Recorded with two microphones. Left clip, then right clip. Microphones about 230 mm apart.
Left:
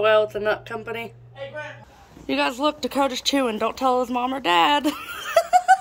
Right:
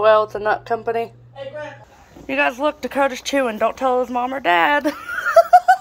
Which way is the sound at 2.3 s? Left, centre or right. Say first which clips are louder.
Right 3 dB; centre.